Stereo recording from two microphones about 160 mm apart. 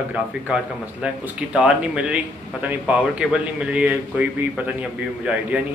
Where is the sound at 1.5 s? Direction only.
5° right (ahead or behind).